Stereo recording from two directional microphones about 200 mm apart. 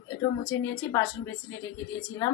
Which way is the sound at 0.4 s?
15° left (ahead or behind).